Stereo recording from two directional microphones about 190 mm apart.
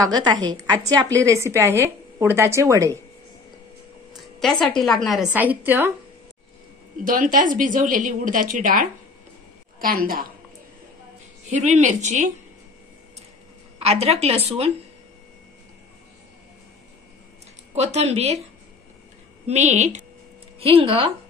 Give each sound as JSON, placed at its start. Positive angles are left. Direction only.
{"t": 0.0, "sound": "a woman's voice", "side_deg": -20}
{"t": 4.1, "sound": "a woman's voice", "side_deg": 0}
{"t": 7.1, "sound": "a woman's voice", "side_deg": -45}
{"t": 11.5, "sound": "a woman's voice", "side_deg": -40}
{"t": 13.7, "sound": "a woman's voice", "side_deg": -35}
{"t": 17.7, "sound": "a woman's voice", "side_deg": -35}
{"t": 19.4, "sound": "a woman's voice", "side_deg": -35}